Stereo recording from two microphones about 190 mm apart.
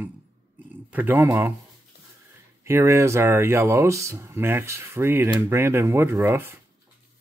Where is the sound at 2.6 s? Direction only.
15° right (ahead or behind).